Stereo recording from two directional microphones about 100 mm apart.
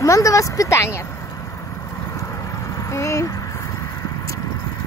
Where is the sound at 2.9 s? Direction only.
30° left (ahead or behind).